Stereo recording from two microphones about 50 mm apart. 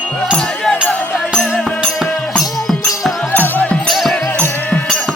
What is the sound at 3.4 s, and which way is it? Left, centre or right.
Music, left.